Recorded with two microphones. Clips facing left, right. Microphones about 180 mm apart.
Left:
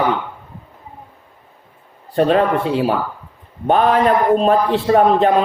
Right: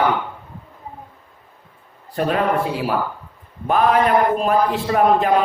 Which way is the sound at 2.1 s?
30° left (ahead or behind).